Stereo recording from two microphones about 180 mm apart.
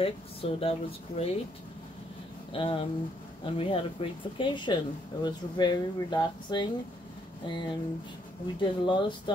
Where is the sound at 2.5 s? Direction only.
30° left (ahead or behind).